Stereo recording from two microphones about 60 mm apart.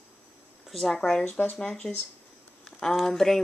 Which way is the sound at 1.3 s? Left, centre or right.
Left.